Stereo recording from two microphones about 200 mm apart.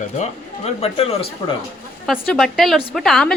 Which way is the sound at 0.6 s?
30° left (ahead or behind).